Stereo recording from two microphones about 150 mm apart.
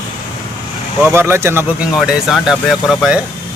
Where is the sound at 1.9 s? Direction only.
Centre (ahead or behind).